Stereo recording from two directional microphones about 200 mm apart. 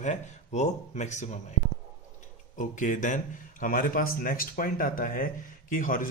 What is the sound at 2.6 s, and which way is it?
A man's voice, 40° left (ahead or behind).